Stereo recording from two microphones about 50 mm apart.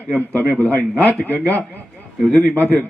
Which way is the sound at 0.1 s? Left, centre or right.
Left.